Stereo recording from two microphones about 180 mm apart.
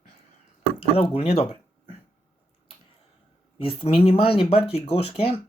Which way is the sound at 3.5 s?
30° left (ahead or behind).